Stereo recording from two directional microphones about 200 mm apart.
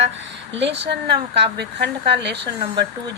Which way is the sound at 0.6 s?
60° right (ahead or behind).